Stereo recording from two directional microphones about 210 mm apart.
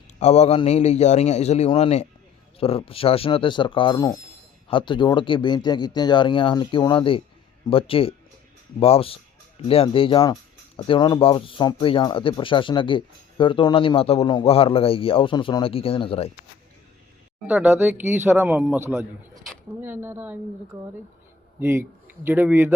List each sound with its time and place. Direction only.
0.2 s a man's voice: 30° left (ahead or behind)
17.4 s speech: 5° right (ahead or behind)
21.6 s a man's voice: 10° right (ahead or behind)